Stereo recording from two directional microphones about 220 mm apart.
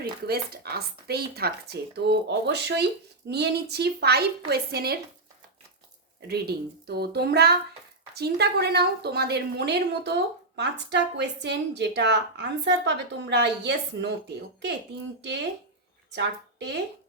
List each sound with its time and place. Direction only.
0.0 s a woman's voice: 45° right (ahead or behind)
6.2 s a woman's voice: 45° right (ahead or behind)